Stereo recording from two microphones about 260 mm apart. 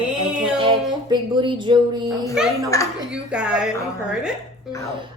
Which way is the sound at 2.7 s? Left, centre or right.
Centre.